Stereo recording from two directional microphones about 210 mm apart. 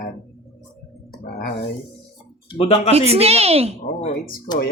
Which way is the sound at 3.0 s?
30° right (ahead or behind).